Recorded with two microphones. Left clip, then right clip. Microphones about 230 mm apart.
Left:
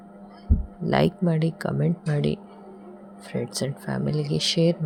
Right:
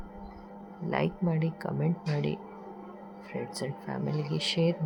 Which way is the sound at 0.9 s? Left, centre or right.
Left.